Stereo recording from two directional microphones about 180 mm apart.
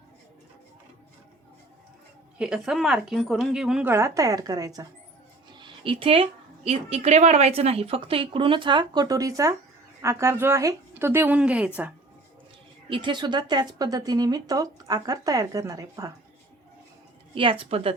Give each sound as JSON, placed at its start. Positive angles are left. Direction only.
{"t": 2.4, "sound": "a woman's voice", "side_deg": -5}
{"t": 3.9, "sound": "speech", "side_deg": -15}
{"t": 5.5, "sound": "a sound", "side_deg": -25}
{"t": 6.7, "sound": "a woman's voice", "side_deg": -35}
{"t": 12.9, "sound": "speech", "side_deg": -25}
{"t": 17.3, "sound": "speech", "side_deg": -30}